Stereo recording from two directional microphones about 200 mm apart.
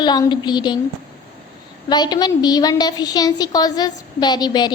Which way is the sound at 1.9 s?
20° left (ahead or behind).